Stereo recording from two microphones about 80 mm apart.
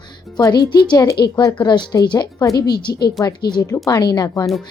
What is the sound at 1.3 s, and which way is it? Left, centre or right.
Speech, left.